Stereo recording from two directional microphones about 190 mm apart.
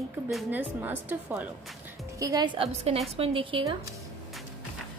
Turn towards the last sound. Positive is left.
turn(degrees=-30)  # may be behind; listen again after turning